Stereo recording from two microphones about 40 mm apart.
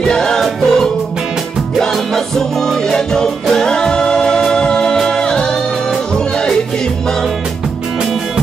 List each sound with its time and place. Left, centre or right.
0.1 s music: centre